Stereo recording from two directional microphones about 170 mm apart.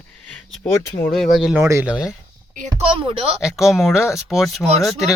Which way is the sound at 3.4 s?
Centre (ahead or behind).